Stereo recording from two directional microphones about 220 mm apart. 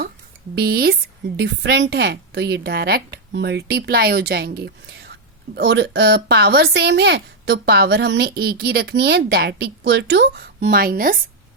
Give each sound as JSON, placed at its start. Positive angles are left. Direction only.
{"t": 0.5, "sound": "speech", "side_deg": -45}